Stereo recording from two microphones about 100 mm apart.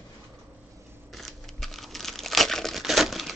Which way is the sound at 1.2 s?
Centre (ahead or behind).